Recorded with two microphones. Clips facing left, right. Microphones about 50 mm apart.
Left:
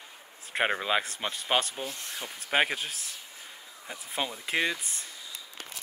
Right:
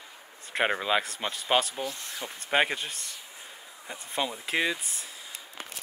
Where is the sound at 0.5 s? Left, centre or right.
Centre.